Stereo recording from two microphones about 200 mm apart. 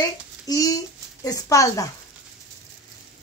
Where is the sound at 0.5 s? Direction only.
20° left (ahead or behind).